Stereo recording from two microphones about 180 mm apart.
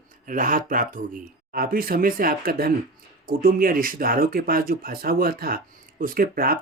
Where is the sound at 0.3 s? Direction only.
50° right (ahead or behind).